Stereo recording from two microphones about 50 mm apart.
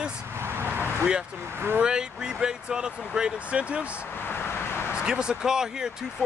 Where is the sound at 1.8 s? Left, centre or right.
Centre.